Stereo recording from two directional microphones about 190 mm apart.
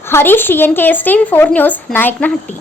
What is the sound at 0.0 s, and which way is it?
A woman's voice, 10° left (ahead or behind).